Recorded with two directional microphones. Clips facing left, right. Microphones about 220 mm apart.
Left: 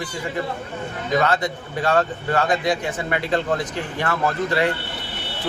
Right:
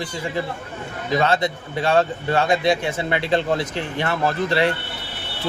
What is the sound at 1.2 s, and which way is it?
A man's voice, 25° right (ahead or behind).